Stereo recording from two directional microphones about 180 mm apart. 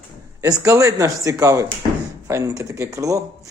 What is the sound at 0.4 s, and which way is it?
Speech, 20° right (ahead or behind).